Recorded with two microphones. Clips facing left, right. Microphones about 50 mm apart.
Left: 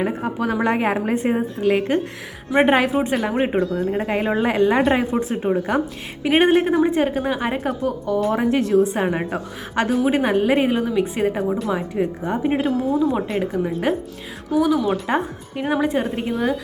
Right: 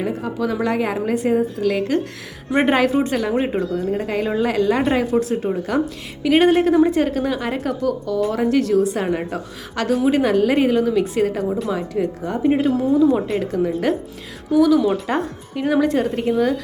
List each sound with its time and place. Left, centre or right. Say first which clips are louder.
0.0 s a woman's voice: even; left
2.5 s speech: even; centre
3.6 s speech: even; centre
4.0 s a woman's voice: even; left
6.7 s a woman's voice: right 2 dB; centre
12.5 s speech: right 3 dB; centre